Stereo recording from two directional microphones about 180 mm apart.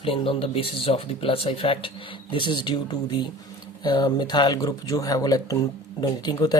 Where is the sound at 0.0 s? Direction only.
30° left (ahead or behind).